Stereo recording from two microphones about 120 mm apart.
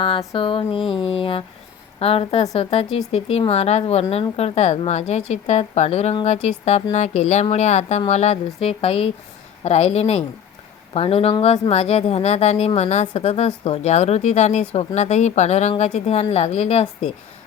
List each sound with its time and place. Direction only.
0.3 s a woman's voice: 45° left (ahead or behind); by 8.4 s 65° left (ahead or behind)
8.6 s a woman's voice: 55° left (ahead or behind)